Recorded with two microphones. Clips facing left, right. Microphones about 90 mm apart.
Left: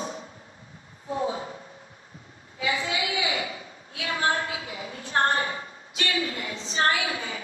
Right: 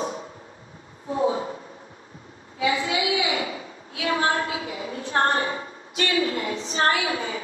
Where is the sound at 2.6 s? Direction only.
35° right (ahead or behind).